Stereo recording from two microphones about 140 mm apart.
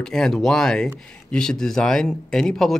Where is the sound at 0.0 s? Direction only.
Centre (ahead or behind).